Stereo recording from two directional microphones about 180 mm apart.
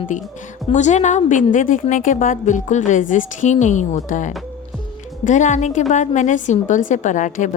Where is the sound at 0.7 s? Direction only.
40° left (ahead or behind).